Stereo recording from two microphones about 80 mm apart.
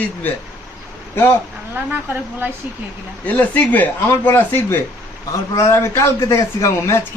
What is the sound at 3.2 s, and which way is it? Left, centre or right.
A man's voice, left.